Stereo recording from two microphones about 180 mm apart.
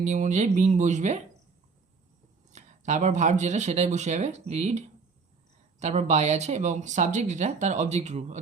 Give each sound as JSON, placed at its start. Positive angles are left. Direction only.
{"t": 0.0, "sound": "speech", "side_deg": -40}
{"t": 2.5, "sound": "speech", "side_deg": -40}